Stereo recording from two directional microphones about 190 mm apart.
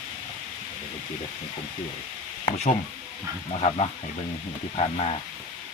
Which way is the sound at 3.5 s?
35° left (ahead or behind).